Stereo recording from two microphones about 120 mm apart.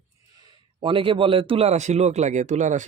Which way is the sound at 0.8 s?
45° right (ahead or behind).